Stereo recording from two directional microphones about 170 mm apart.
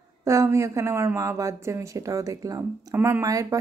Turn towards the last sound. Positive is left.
turn(degrees=-20)  # may be behind; listen again after turning